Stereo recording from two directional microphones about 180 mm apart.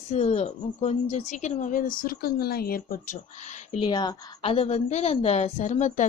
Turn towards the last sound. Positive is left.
turn(degrees=40)  # may be behind; listen again after turning